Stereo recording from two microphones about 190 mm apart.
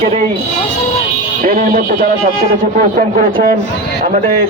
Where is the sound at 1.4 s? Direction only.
45° right (ahead or behind).